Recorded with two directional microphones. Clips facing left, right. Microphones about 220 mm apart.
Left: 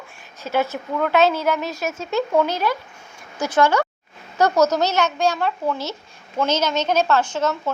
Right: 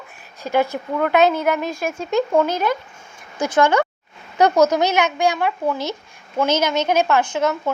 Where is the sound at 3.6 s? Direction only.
15° right (ahead or behind).